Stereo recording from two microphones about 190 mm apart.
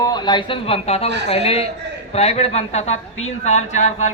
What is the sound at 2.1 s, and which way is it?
Speech, 35° left (ahead or behind).